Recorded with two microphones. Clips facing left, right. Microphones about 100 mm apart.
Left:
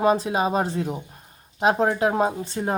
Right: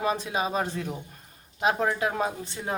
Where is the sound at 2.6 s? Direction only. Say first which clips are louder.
Left 10 dB; 45° left (ahead or behind).